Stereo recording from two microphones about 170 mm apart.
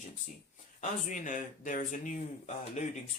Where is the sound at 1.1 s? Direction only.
50° left (ahead or behind).